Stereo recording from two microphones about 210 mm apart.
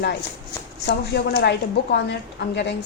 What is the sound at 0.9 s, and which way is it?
A woman's voice, 50° left (ahead or behind).